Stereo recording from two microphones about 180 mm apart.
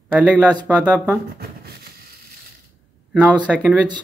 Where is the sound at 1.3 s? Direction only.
65° right (ahead or behind).